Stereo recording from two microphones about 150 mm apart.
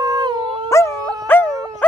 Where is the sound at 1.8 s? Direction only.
10° left (ahead or behind).